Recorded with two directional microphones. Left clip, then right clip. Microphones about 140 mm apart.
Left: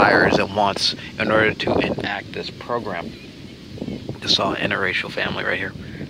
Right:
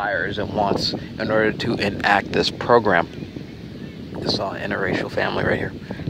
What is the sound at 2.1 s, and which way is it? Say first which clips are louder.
Speech: right 9 dB; 55° right (ahead or behind).